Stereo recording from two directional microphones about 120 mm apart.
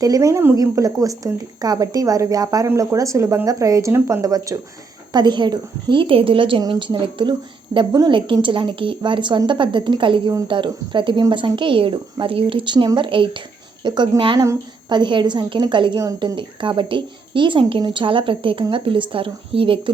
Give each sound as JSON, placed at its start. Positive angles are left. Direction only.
{"t": 0.0, "sound": "a woman's voice", "side_deg": -30}
{"t": 14.3, "sound": "speech", "side_deg": -25}
{"t": 14.8, "sound": "a woman's voice", "side_deg": -40}